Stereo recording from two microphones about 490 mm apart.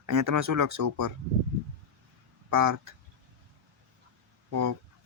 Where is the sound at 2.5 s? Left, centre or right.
Right.